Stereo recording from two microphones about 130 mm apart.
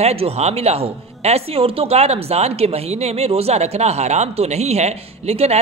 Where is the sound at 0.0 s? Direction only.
50° right (ahead or behind).